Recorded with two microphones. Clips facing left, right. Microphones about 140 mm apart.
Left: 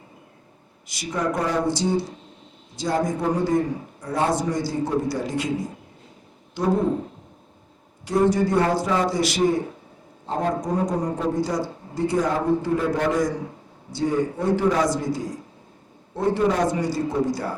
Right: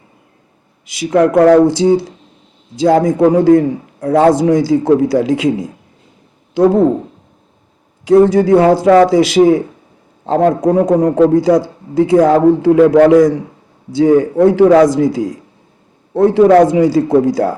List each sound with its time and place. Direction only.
0.9 s a man's voice: 85° right
6.5 s speech: 75° right (ahead or behind)
8.0 s a man's voice: 90° right